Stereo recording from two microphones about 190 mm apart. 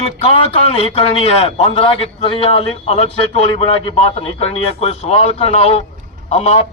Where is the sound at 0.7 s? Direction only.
30° left (ahead or behind).